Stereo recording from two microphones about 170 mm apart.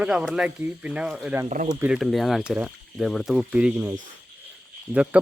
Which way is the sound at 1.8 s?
5° right (ahead or behind).